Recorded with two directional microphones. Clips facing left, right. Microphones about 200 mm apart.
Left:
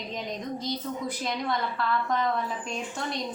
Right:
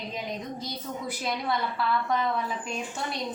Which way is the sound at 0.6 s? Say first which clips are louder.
Left 3 dB; 5° right (ahead or behind).